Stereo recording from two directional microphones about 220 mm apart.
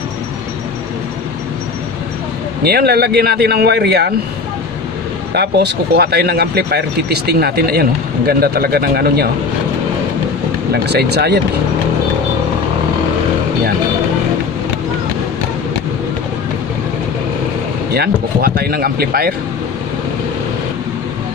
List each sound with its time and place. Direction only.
2.6 s speech: 45° right (ahead or behind)
5.3 s speech: 50° right (ahead or behind)
10.7 s speech: 50° right (ahead or behind)
17.9 s speech: 45° right (ahead or behind)